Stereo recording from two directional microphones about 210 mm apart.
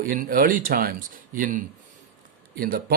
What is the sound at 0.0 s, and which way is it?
Speech, 40° right (ahead or behind).